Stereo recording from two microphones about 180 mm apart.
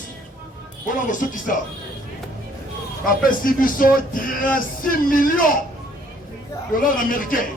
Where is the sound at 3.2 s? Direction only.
50° left (ahead or behind).